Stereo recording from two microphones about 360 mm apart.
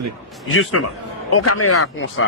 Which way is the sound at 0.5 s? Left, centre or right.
Left.